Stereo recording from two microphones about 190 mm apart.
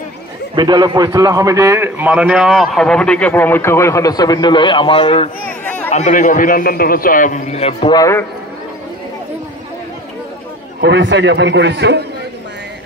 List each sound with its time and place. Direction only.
0.6 s a man's voice: 20° right (ahead or behind); by 5.3 s 30° left (ahead or behind)
5.6 s chatter: 10° left (ahead or behind)
5.9 s a man's voice: 40° left (ahead or behind)
7.9 s a man's voice: 15° left (ahead or behind)
10.8 s a man's voice: 65° right (ahead or behind)